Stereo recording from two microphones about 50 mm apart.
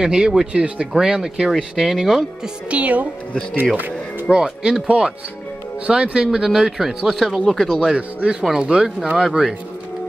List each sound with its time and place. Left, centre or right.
0.0 s speech: centre
0.5 s speech: right
0.9 s speech: centre
2.7 s speech: right
4.3 s speech: centre
7.9 s speech: centre